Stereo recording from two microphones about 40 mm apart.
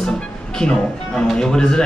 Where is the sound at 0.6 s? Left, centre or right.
Left.